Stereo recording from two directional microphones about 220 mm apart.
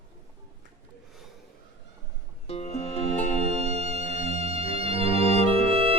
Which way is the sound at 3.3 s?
30° right (ahead or behind).